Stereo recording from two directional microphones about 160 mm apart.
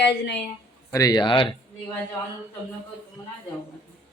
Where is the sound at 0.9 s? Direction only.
20° left (ahead or behind).